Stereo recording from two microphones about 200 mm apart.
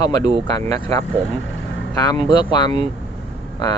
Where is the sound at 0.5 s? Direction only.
15° left (ahead or behind).